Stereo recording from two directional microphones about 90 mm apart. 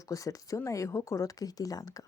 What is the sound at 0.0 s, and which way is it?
Speech, 40° left (ahead or behind).